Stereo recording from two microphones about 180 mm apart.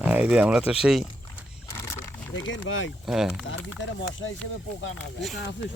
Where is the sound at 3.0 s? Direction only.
Centre (ahead or behind).